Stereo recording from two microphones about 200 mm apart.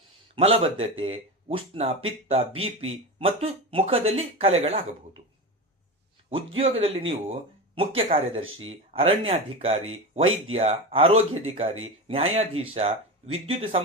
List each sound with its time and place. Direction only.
0.3 s speech: 30° right (ahead or behind)
6.6 s speech: 30° right (ahead or behind)